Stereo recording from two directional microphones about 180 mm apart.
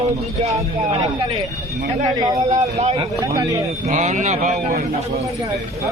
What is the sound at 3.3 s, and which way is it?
Speech, 20° right (ahead or behind).